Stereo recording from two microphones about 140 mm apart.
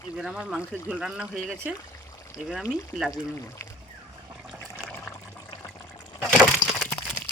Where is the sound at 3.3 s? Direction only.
20° left (ahead or behind).